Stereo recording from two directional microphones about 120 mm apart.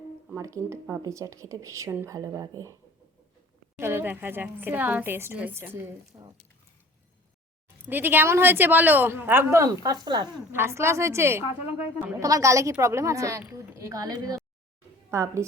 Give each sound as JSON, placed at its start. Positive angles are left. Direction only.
{"t": 0.3, "sound": "speech", "side_deg": -25}
{"t": 3.8, "sound": "a woman's voice", "side_deg": -20}
{"t": 7.9, "sound": "a woman's voice", "side_deg": -15}
{"t": 10.5, "sound": "speech", "side_deg": -20}